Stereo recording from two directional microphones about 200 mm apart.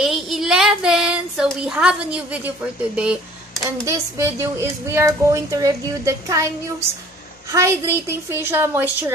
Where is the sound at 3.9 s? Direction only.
15° right (ahead or behind).